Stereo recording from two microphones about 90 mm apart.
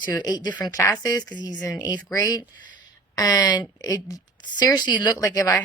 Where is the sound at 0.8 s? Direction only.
35° left (ahead or behind).